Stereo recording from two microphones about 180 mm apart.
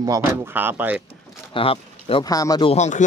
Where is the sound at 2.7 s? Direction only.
40° left (ahead or behind).